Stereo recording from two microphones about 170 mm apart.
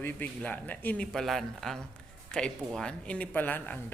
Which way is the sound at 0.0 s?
10° left (ahead or behind).